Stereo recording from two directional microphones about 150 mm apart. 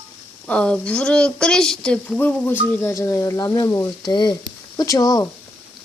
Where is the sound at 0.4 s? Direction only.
5° left (ahead or behind); by 5.3 s 25° left (ahead or behind).